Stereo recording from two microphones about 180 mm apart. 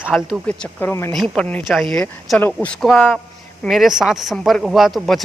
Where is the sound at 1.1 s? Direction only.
5° left (ahead or behind).